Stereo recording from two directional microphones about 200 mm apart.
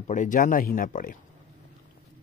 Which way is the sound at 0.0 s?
40° left (ahead or behind).